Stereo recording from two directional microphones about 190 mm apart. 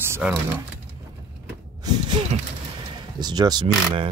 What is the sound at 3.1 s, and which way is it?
Speech, 20° right (ahead or behind).